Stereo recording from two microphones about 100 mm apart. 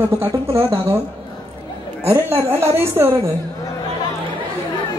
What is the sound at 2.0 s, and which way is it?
A woman's voice, 25° right (ahead or behind).